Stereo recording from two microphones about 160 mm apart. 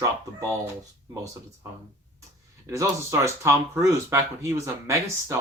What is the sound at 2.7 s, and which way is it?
Speech, 20° right (ahead or behind).